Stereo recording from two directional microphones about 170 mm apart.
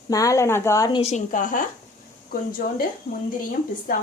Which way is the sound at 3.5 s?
55° left (ahead or behind).